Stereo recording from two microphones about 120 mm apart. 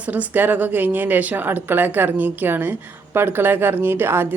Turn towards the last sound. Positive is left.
turn(degrees=-20)  # may be behind; listen again after turning